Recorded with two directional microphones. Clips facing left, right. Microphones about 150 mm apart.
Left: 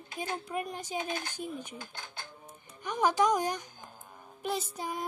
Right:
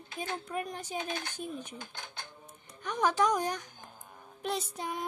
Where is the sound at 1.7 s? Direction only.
20° right (ahead or behind).